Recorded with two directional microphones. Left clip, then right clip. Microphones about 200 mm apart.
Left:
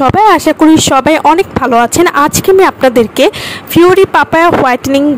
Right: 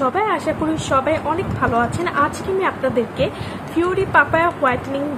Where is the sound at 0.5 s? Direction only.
60° left (ahead or behind).